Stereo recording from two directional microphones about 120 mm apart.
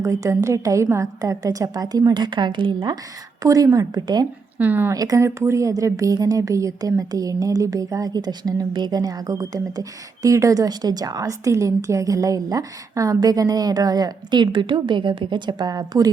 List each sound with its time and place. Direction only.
0.0 s speech: 25° right (ahead or behind)
3.4 s speech: 30° right (ahead or behind)
4.5 s speech: 15° right (ahead or behind)
4.9 s a woman's voice: 30° right (ahead or behind)